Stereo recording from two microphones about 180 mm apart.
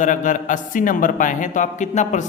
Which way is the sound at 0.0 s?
45° left (ahead or behind).